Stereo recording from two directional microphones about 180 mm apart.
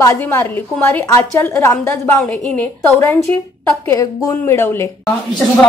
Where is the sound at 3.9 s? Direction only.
15° left (ahead or behind).